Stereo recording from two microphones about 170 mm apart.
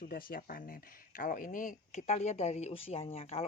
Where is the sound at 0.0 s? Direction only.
60° left (ahead or behind).